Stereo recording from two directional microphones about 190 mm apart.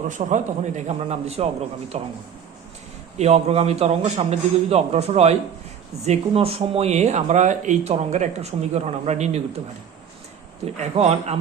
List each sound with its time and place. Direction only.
0.1 s speech: 40° right (ahead or behind)
3.2 s speech: 35° right (ahead or behind)
10.8 s speech: 35° right (ahead or behind)